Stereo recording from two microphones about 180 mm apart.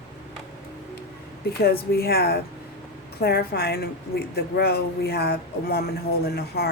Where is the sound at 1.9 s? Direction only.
60° left (ahead or behind).